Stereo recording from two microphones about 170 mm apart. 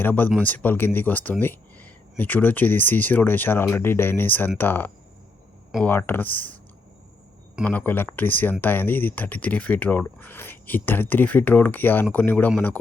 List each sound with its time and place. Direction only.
0.0 s speech: 10° left (ahead or behind)
7.6 s speech: 10° left (ahead or behind)